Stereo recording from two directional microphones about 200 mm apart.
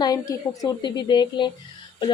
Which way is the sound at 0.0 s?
20° left (ahead or behind).